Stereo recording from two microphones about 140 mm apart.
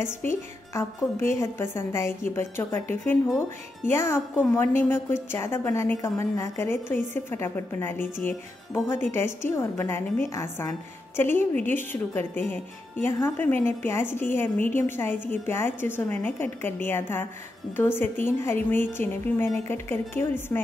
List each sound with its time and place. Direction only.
0.7 s a woman's voice: 20° left (ahead or behind)